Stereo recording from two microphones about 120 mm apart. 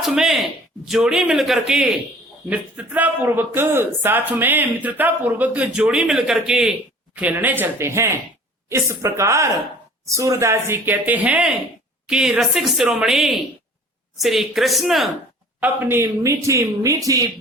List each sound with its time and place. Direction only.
0.0 s a man's voice: centre (ahead or behind)
15.6 s speech: 15° right (ahead or behind)